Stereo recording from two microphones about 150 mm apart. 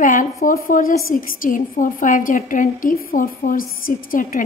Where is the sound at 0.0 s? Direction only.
60° left (ahead or behind).